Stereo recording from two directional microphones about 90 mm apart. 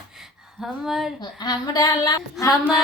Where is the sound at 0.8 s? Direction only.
Centre (ahead or behind).